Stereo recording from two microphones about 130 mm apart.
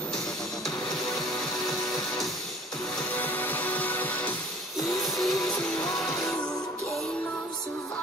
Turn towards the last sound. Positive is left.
turn(degrees=0)  # may be behind; listen again after turning